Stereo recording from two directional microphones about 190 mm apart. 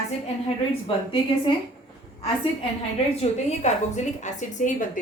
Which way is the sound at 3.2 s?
35° left (ahead or behind).